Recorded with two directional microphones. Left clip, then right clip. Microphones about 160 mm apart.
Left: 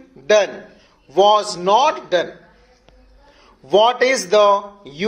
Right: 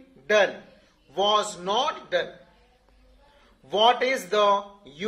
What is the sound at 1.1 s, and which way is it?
Speech, 30° left (ahead or behind).